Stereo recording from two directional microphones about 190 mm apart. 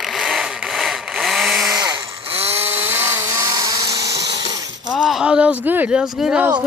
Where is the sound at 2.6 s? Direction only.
10° right (ahead or behind).